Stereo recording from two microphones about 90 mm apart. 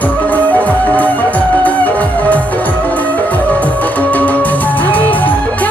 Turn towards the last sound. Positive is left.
turn(degrees=15)  # may be behind; listen again after turning